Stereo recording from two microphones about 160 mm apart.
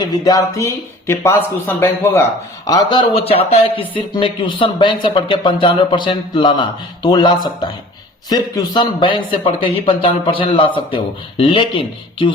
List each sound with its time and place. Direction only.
0.0 s speech: 25° left (ahead or behind)
2.6 s a man's voice: 25° left (ahead or behind)
3.2 s speech: 35° left (ahead or behind)